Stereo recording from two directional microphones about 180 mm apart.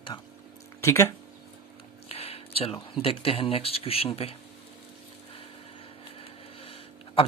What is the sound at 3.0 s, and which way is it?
Speech, 30° left (ahead or behind).